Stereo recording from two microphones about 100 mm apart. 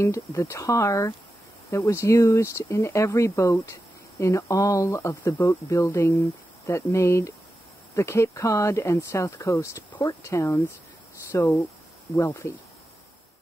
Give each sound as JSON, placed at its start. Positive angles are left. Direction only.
{"t": 0.0, "sound": "speech", "side_deg": 30}